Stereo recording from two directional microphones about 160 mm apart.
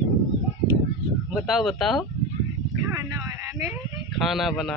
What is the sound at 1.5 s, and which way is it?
Speech, centre (ahead or behind).